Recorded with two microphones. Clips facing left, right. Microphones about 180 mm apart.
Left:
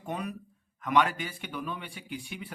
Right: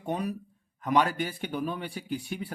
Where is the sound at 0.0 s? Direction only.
35° right (ahead or behind).